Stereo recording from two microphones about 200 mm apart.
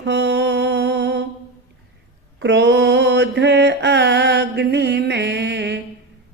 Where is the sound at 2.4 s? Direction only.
60° right (ahead or behind).